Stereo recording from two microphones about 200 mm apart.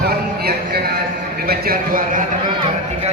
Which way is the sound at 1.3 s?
50° right (ahead or behind).